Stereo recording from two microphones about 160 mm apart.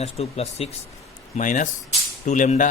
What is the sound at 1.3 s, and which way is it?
Speech, 50° left (ahead or behind).